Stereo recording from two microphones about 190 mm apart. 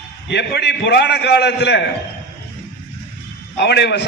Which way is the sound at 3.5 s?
60° left (ahead or behind).